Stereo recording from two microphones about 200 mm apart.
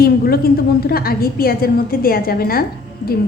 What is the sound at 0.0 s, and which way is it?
A woman's voice, 50° left (ahead or behind).